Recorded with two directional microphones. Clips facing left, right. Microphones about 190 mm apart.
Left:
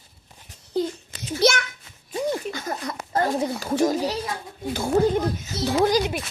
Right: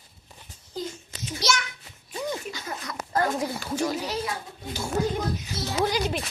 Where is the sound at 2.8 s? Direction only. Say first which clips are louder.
Left 1 dB; 30° left (ahead or behind).